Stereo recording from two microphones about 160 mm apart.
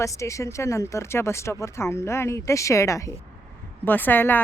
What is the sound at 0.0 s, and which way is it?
A woman's voice, 20° left (ahead or behind).